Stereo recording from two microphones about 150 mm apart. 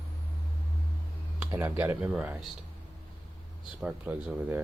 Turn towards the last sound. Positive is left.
turn(degrees=-10)  # may be behind; listen again after turning